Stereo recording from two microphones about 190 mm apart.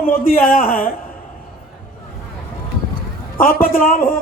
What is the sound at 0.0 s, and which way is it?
Speech, 50° left (ahead or behind).